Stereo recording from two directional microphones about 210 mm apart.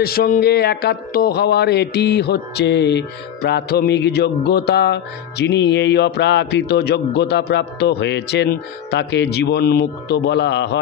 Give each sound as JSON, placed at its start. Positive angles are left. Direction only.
{"t": 0.0, "sound": "speech", "side_deg": 45}